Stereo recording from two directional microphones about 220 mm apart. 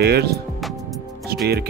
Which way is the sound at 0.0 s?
45° right (ahead or behind).